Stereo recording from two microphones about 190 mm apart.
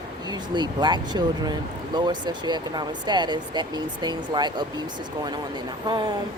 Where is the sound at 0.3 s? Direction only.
20° right (ahead or behind).